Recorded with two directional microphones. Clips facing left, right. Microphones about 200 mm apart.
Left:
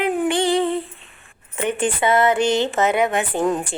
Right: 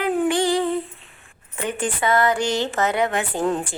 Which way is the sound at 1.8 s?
25° left (ahead or behind).